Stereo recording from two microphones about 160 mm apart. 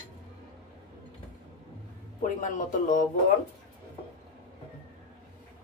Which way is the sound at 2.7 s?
55° left (ahead or behind).